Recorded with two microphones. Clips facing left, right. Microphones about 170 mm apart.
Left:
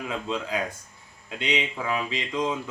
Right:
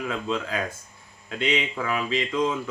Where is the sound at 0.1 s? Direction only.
20° left (ahead or behind).